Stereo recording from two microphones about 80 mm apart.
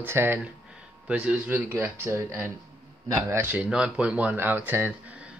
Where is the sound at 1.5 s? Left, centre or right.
Right.